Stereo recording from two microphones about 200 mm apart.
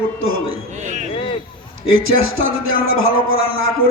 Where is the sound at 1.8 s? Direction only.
85° right.